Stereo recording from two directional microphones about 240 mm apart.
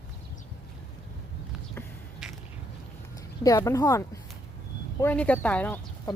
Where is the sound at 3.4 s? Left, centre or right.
Centre.